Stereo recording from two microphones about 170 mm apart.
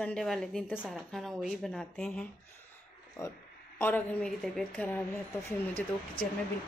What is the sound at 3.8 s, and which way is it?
A woman's voice, 10° left (ahead or behind).